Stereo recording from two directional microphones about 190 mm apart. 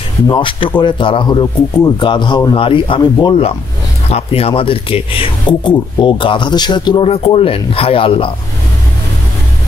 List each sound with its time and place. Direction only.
0.3 s speech: 25° left (ahead or behind)